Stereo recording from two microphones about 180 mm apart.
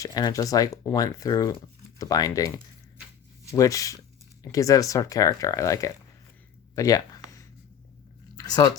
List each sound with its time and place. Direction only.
0.0 s speech: 20° left (ahead or behind)
3.5 s speech: 20° left (ahead or behind)
6.7 s a sound: 20° left (ahead or behind)
8.4 s speech: 20° left (ahead or behind)